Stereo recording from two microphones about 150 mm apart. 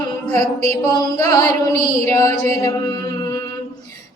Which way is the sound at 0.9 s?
25° left (ahead or behind).